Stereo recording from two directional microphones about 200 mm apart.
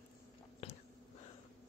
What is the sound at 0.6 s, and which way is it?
Whispering, 30° left (ahead or behind).